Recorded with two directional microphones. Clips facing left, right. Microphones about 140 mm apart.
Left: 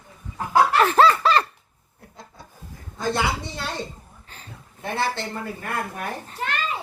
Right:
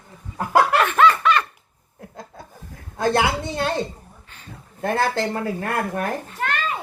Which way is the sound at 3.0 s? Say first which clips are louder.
Right 5 dB; 55° right (ahead or behind).